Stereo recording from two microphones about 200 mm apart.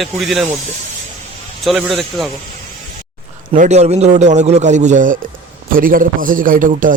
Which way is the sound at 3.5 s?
35° right (ahead or behind).